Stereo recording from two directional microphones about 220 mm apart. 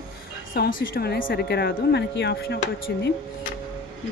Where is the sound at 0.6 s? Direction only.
40° left (ahead or behind).